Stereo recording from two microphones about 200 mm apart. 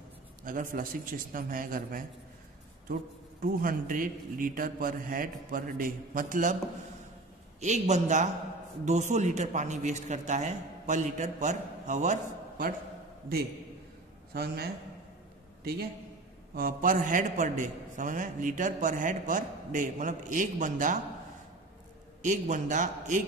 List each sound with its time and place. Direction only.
0.4 s a man's voice: 45° right (ahead or behind)
3.4 s a man's voice: 45° right (ahead or behind)
7.6 s a man's voice: 35° right (ahead or behind)
14.3 s a man's voice: 50° right (ahead or behind)
16.5 s a man's voice: 45° right (ahead or behind)
22.2 s a man's voice: 40° right (ahead or behind)